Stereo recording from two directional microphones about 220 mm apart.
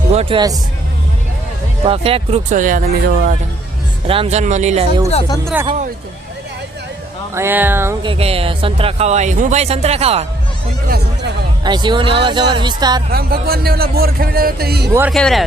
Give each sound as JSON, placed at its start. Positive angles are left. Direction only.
{"t": 0.1, "sound": "speech", "side_deg": -25}
{"t": 1.8, "sound": "speech", "side_deg": -25}
{"t": 4.0, "sound": "speech", "side_deg": -25}
{"t": 7.3, "sound": "speech", "side_deg": -10}
{"t": 8.0, "sound": "speech", "side_deg": -25}
{"t": 10.8, "sound": "speech", "side_deg": -45}
{"t": 11.6, "sound": "speech", "side_deg": -20}
{"t": 13.1, "sound": "speech", "side_deg": -45}
{"t": 15.1, "sound": "speech", "side_deg": 0}